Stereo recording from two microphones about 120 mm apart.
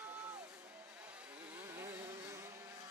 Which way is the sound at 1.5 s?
20° right (ahead or behind).